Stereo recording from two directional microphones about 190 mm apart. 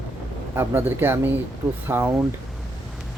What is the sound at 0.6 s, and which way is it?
Speech, 10° right (ahead or behind).